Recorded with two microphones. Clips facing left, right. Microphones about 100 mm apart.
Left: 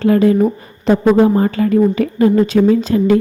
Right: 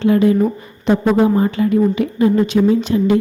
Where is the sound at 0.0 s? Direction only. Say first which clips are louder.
Left 1 dB; 40° left (ahead or behind).